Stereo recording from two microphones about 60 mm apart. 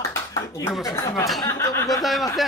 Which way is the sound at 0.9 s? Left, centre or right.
Left.